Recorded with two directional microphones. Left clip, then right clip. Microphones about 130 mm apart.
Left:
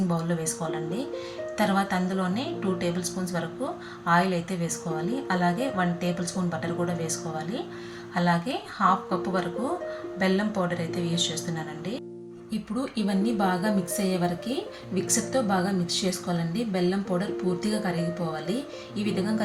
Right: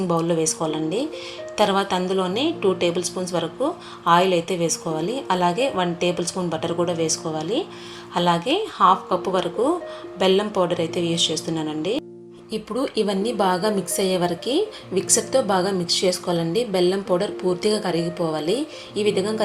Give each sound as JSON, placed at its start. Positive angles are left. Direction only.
{"t": 0.1, "sound": "a woman's voice", "side_deg": -20}